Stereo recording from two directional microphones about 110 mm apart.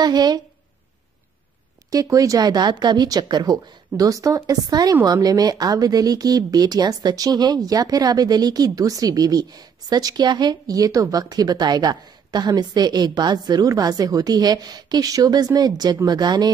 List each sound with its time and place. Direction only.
0.0 s speech: 40° right (ahead or behind)
1.9 s speech: 30° right (ahead or behind)